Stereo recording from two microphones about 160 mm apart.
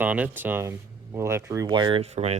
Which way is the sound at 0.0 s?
10° right (ahead or behind).